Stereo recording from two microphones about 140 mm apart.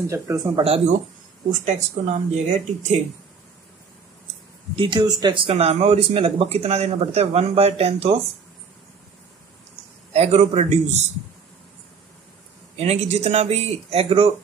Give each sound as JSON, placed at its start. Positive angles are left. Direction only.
{"t": 0.1, "sound": "speech", "side_deg": -20}
{"t": 0.6, "sound": "speech", "side_deg": -45}
{"t": 1.5, "sound": "speech", "side_deg": -60}
{"t": 4.7, "sound": "speech", "side_deg": -35}
{"t": 10.1, "sound": "speech", "side_deg": -50}
{"t": 12.7, "sound": "speech", "side_deg": -50}